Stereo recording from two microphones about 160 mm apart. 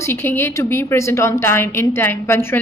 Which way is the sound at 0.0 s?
15° left (ahead or behind).